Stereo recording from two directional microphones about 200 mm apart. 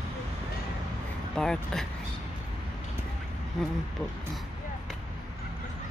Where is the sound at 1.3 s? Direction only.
5° left (ahead or behind).